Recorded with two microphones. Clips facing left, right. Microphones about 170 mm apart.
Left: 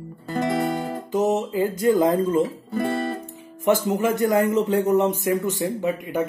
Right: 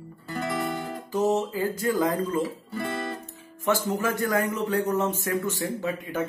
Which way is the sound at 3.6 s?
20° left (ahead or behind).